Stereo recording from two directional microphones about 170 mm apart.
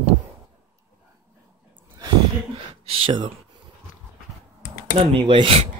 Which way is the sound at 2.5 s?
30° right (ahead or behind).